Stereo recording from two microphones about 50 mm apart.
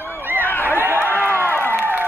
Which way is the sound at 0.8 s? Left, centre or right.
Right.